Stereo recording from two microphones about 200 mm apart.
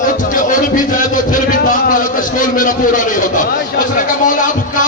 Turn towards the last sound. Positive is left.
turn(degrees=40)  # may be behind; listen again after turning